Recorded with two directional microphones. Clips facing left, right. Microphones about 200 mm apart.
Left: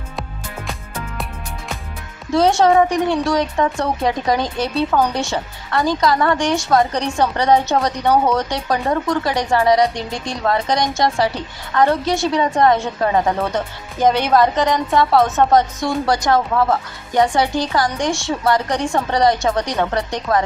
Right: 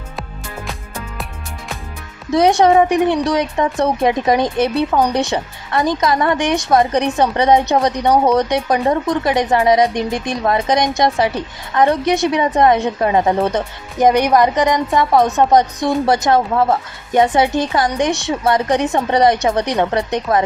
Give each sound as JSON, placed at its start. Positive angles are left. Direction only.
{"t": 2.3, "sound": "a woman's voice", "side_deg": -15}